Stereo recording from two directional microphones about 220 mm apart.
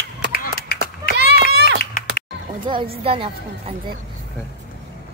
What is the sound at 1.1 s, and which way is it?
Run, 50° right (ahead or behind).